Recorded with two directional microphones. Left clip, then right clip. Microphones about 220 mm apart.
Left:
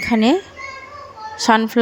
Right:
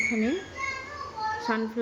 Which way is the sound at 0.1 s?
50° left (ahead or behind).